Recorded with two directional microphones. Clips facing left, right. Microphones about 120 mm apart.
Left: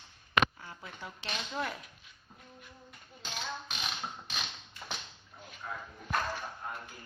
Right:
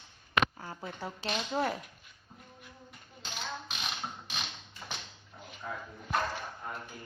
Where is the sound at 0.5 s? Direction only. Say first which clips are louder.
Right 6 dB; 40° right (ahead or behind).